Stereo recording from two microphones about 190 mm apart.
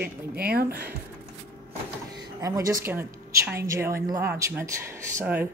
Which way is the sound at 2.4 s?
15° right (ahead or behind).